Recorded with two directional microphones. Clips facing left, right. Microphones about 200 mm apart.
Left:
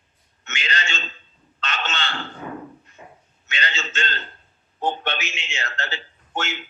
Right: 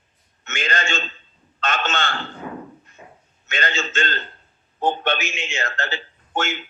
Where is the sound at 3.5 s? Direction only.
50° right (ahead or behind).